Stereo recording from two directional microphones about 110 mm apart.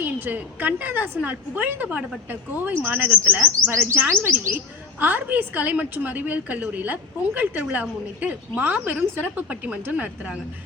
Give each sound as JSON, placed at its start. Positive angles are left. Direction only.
{"t": 0.0, "sound": "a woman's voice", "side_deg": -15}